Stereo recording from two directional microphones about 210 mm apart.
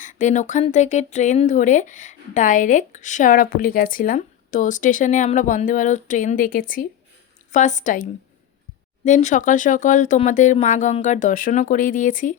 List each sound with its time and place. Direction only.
0.0 s speech: 35° left (ahead or behind)
9.0 s speech: 35° left (ahead or behind)